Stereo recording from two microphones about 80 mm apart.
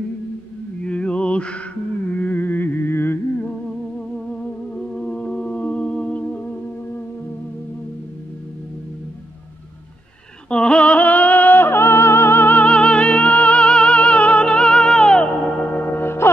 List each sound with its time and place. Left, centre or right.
0.8 s music: centre; by 3.2 s left
5.0 s music: centre
10.5 s music: centre; by 16.3 s left